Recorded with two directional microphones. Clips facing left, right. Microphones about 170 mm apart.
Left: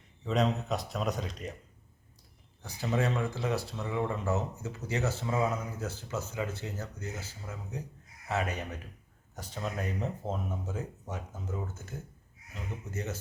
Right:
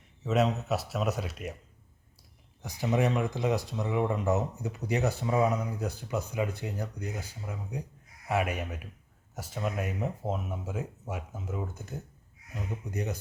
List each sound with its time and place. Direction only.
0.2 s speech: 5° right (ahead or behind)
2.6 s speech: 15° right (ahead or behind)